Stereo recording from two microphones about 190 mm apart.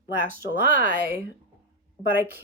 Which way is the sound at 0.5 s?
45° right (ahead or behind).